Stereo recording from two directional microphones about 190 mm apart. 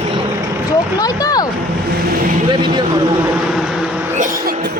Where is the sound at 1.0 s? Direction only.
20° left (ahead or behind).